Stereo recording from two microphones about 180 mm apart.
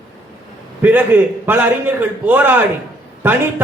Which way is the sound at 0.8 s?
10° right (ahead or behind).